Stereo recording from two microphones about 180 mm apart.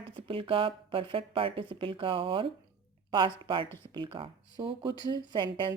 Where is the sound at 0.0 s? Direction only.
30° right (ahead or behind).